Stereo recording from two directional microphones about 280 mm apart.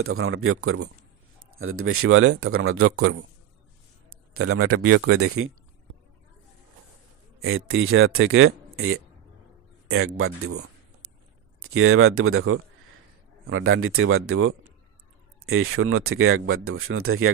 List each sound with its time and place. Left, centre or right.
0.0 s speech: right
4.3 s speech: right
7.3 s speech: right